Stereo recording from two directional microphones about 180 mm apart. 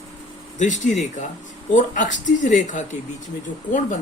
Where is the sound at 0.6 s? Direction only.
40° left (ahead or behind).